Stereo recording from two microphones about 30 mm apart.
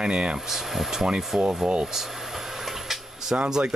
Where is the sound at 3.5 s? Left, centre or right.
Right.